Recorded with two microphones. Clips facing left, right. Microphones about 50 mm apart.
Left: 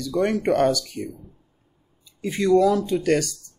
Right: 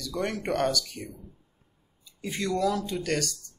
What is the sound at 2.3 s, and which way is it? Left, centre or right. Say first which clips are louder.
Speech: left 11 dB; centre.